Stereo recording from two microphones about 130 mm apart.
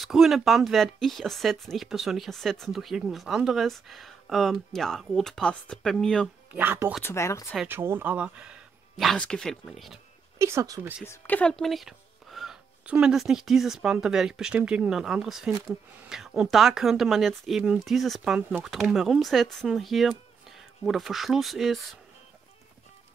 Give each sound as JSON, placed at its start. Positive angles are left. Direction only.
{"t": 0.0, "sound": "speech", "side_deg": 0}
{"t": 6.5, "sound": "speech", "side_deg": -15}
{"t": 7.0, "sound": "speech", "side_deg": 20}
{"t": 7.6, "sound": "speech", "side_deg": -15}
{"t": 9.1, "sound": "speech", "side_deg": 5}
{"t": 10.4, "sound": "speech", "side_deg": -25}
{"t": 11.1, "sound": "speech", "side_deg": 15}
{"t": 11.5, "sound": "speech", "side_deg": 0}